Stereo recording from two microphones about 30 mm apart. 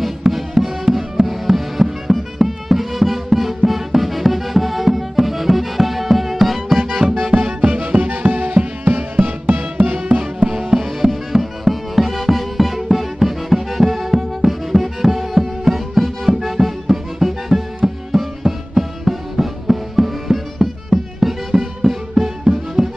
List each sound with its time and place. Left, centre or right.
0.2 s music: centre
7.2 s music: right
7.6 s music: right
8.8 s music: right
9.8 s music: right
10.5 s music: centre